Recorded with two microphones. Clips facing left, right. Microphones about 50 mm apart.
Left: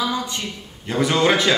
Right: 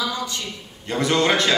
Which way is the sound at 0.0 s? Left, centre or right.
Left.